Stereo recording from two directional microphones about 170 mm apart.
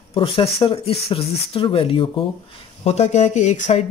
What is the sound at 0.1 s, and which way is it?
Speech, 30° left (ahead or behind).